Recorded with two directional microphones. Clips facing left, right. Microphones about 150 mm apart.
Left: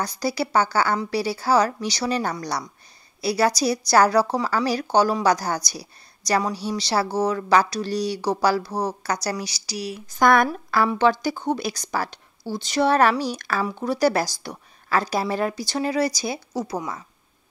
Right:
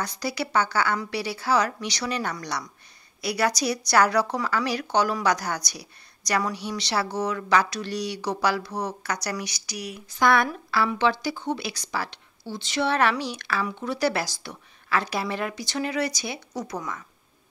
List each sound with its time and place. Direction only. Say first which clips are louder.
0.0 s speech: left 4 dB; 35° left (ahead or behind)
10.0 s a woman's voice: left 4 dB; 45° left (ahead or behind); by 17.0 s 30° left (ahead or behind)